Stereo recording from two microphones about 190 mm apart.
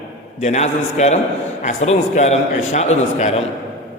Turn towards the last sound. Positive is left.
turn(degrees=35)  # may be behind; listen again after turning